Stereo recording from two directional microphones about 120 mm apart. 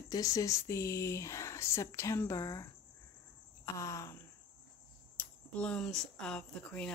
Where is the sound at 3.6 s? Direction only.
25° left (ahead or behind).